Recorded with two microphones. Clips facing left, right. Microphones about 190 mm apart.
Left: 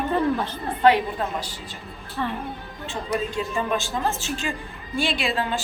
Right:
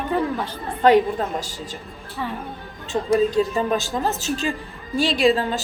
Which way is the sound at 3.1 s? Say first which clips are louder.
Right 8 dB; 40° right (ahead or behind).